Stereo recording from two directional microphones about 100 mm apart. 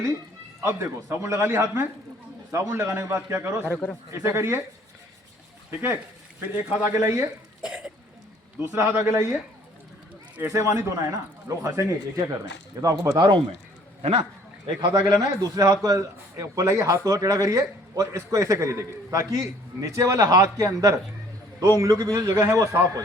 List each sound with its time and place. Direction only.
0.6 s a man's voice: 25° right (ahead or behind)
6.4 s speech: 15° right (ahead or behind)
6.9 s a man's voice: 30° right (ahead or behind)
7.6 s cough: 10° right (ahead or behind)
8.7 s a man's voice: 25° right (ahead or behind)
10.4 s speech: 35° right (ahead or behind)
13.1 s speech: 45° right (ahead or behind)
14.0 s speech: 80° right
14.8 s speech: 45° right (ahead or behind)